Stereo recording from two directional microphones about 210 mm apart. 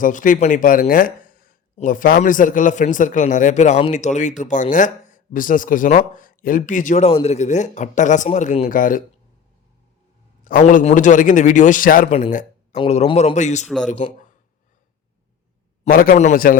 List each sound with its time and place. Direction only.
0.0 s speech: 40° left (ahead or behind)
10.4 s speech: 40° left (ahead or behind)
12.7 s speech: 25° left (ahead or behind)
15.8 s speech: 45° left (ahead or behind)